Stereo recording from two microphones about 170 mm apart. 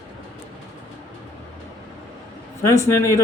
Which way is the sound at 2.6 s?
15° left (ahead or behind).